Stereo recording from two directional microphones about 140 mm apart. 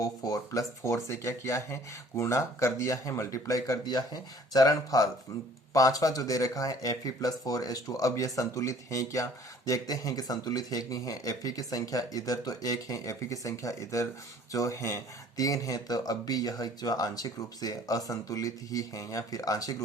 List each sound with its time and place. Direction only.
0.0 s speech: 25° left (ahead or behind)